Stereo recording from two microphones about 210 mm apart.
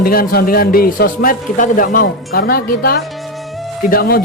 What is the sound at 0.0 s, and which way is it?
Speech, 45° left (ahead or behind).